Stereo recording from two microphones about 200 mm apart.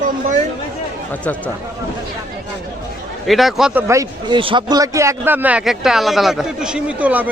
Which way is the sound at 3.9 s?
15° right (ahead or behind).